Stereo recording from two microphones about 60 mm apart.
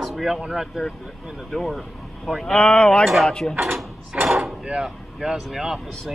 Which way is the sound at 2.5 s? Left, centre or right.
Centre.